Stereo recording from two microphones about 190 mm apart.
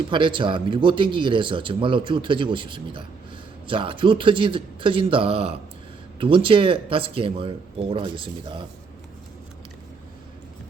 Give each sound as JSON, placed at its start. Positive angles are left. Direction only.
{"t": 0.1, "sound": "speech", "side_deg": -25}